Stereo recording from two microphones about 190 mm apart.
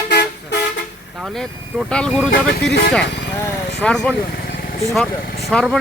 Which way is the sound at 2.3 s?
60° left (ahead or behind).